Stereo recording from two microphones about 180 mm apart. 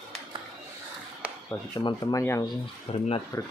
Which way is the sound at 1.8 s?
25° left (ahead or behind).